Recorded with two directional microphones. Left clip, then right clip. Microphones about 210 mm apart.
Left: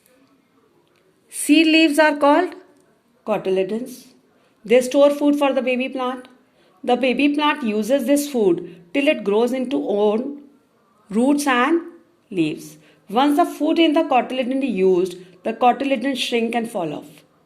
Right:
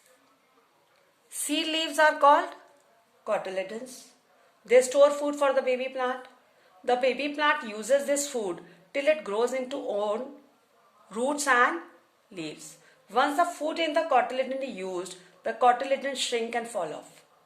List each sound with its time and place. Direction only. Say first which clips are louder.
1.5 s speech: left 14 dB; 25° left (ahead or behind)